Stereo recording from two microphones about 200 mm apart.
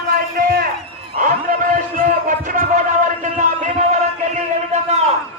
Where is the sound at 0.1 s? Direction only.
50° right (ahead or behind).